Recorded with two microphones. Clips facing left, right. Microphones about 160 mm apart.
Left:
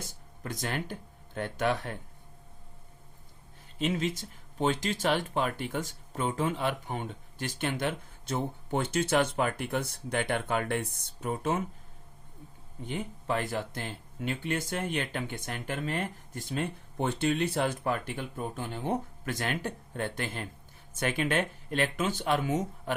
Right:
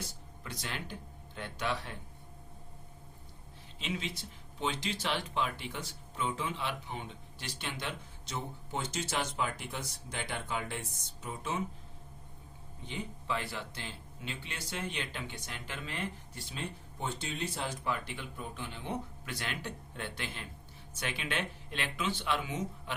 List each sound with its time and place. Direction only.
0.0 s speech: 50° left (ahead or behind)
3.8 s speech: 45° left (ahead or behind)
12.8 s speech: 50° left (ahead or behind)